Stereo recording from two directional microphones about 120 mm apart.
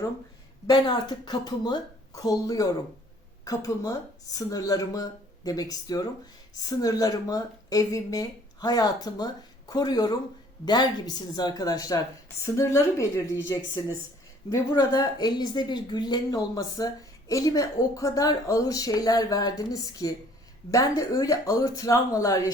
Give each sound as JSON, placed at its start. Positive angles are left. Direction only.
{"t": 0.7, "sound": "a woman's voice", "side_deg": 40}
{"t": 14.5, "sound": "a woman's voice", "side_deg": 30}